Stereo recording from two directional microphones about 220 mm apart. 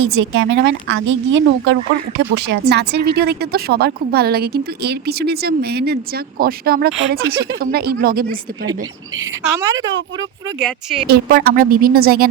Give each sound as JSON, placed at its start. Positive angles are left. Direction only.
{"t": 0.1, "sound": "speech", "side_deg": -55}
{"t": 9.1, "sound": "a woman's voice", "side_deg": -15}
{"t": 10.6, "sound": "speech", "side_deg": 0}
{"t": 11.1, "sound": "speech", "side_deg": -40}